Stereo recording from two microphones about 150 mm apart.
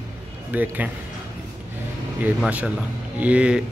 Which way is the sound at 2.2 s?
10° right (ahead or behind).